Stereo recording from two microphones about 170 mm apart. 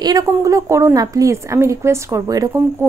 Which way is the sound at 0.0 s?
20° right (ahead or behind).